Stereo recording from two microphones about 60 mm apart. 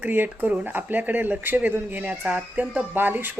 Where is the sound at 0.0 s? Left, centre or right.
Right.